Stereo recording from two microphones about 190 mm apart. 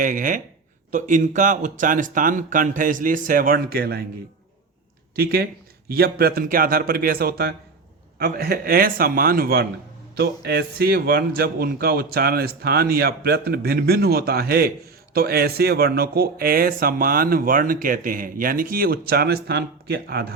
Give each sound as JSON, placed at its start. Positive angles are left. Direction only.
{"t": 0.0, "sound": "speech", "side_deg": -45}
{"t": 5.1, "sound": "a man's voice", "side_deg": -55}